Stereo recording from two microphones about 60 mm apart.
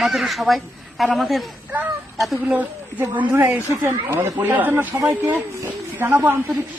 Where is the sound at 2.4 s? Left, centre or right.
Right.